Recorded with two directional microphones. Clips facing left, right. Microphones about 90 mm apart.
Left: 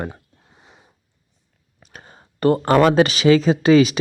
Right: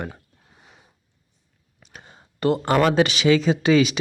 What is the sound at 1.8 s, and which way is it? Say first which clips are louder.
Speech: left 2 dB; 45° left (ahead or behind).